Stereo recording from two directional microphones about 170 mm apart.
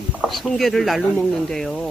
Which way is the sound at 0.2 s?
Centre (ahead or behind).